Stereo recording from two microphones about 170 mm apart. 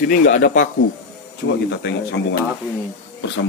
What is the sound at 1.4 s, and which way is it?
Speech, 90° left.